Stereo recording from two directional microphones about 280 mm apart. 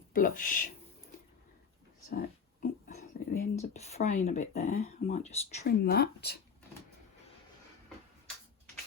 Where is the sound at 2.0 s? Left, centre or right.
Left.